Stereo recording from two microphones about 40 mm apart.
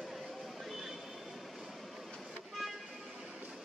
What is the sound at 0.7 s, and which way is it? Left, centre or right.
Vehicle, centre.